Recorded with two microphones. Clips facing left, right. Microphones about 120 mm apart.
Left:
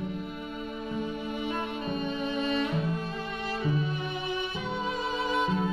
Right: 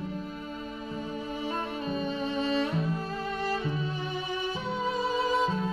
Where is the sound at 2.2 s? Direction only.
35° right (ahead or behind).